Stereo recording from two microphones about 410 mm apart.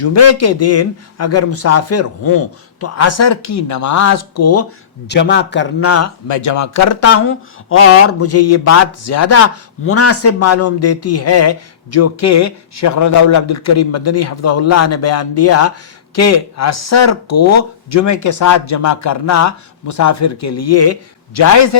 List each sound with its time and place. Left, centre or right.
0.0 s a man's voice: left
5.0 s a man's voice: left